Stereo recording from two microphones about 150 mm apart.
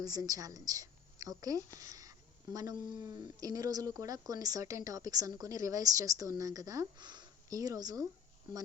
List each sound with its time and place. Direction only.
0.0 s speech: 25° right (ahead or behind)